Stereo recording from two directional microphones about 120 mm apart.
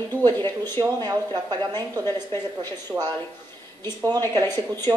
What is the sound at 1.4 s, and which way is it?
Speech, 35° right (ahead or behind).